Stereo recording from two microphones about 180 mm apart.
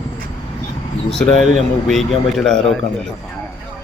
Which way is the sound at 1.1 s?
5° left (ahead or behind).